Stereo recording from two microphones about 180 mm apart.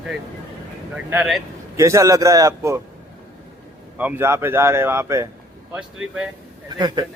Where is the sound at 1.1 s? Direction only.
10° right (ahead or behind).